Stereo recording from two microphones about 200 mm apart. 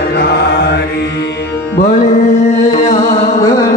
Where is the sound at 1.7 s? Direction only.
50° left (ahead or behind).